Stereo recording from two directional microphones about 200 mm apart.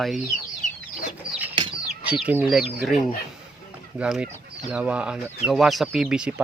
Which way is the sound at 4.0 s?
5° right (ahead or behind).